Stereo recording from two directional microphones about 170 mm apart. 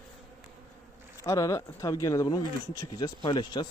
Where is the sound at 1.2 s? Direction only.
20° left (ahead or behind).